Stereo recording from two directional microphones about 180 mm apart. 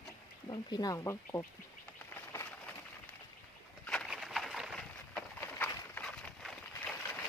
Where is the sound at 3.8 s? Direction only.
Centre (ahead or behind).